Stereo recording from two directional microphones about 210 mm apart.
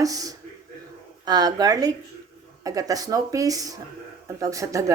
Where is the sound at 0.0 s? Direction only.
15° right (ahead or behind).